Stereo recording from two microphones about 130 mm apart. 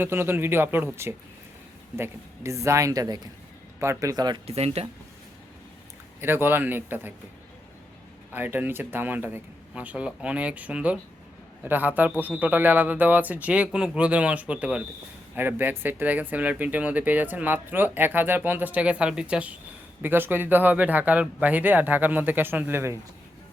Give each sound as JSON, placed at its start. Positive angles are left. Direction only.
{"t": 0.0, "sound": "a woman's voice", "side_deg": -15}
{"t": 4.4, "sound": "speech", "side_deg": -50}
{"t": 6.1, "sound": "speech", "side_deg": -15}
{"t": 8.3, "sound": "speech", "side_deg": -15}